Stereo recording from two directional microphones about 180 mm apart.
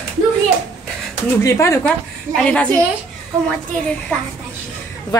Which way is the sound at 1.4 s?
15° left (ahead or behind).